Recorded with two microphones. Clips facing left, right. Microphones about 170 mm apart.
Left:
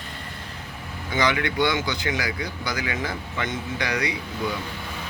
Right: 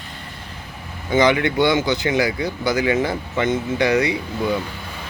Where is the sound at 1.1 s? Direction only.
20° right (ahead or behind).